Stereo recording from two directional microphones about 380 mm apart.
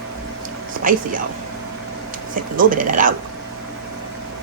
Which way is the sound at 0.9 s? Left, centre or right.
Right.